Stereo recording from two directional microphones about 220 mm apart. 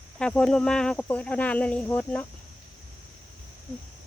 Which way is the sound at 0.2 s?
5° left (ahead or behind).